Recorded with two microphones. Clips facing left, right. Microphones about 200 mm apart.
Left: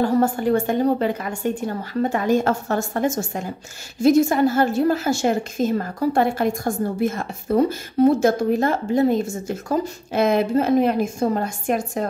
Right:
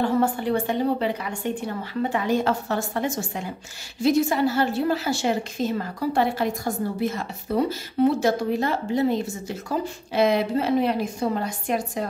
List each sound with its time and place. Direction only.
0.0 s a woman's voice: 45° left (ahead or behind)